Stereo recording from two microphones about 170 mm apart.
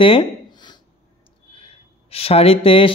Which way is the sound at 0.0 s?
30° left (ahead or behind).